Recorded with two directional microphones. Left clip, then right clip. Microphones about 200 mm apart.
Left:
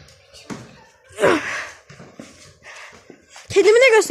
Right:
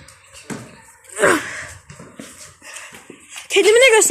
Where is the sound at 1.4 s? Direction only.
25° left (ahead or behind).